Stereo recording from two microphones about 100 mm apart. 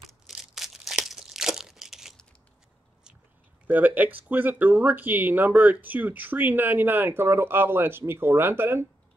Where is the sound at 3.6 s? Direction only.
15° right (ahead or behind).